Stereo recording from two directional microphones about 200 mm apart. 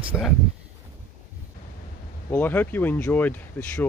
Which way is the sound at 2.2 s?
10° left (ahead or behind).